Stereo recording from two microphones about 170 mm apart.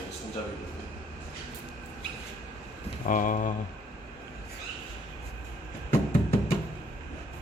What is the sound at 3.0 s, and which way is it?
Speech, 50° left (ahead or behind).